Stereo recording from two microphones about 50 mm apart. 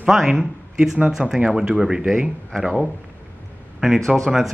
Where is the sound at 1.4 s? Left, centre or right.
Centre.